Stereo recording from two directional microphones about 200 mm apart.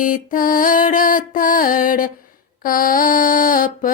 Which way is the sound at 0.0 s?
40° left (ahead or behind).